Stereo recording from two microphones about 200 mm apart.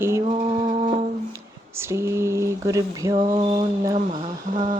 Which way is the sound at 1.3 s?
15° right (ahead or behind).